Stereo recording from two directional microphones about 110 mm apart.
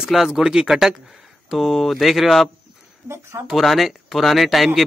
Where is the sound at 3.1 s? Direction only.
25° right (ahead or behind).